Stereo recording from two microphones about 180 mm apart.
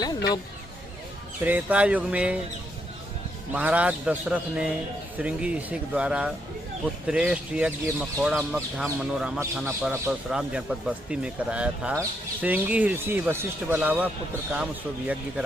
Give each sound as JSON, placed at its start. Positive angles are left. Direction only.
{"t": 0.0, "sound": "speech", "side_deg": 20}
{"t": 1.4, "sound": "speech", "side_deg": -10}
{"t": 3.5, "sound": "speech", "side_deg": -10}